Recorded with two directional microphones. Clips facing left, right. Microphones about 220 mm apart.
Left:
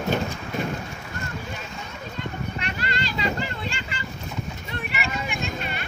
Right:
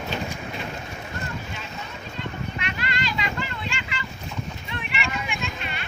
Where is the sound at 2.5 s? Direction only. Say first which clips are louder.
Left 1 dB; 40° left (ahead or behind).